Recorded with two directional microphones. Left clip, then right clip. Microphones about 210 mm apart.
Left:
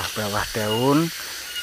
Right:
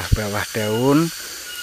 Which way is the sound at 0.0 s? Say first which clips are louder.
Right 1 dB; 30° right (ahead or behind).